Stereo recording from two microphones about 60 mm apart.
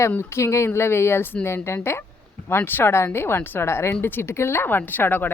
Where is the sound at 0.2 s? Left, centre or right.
Left.